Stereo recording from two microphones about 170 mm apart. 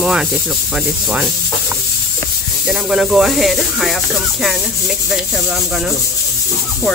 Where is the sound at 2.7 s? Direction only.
5° right (ahead or behind).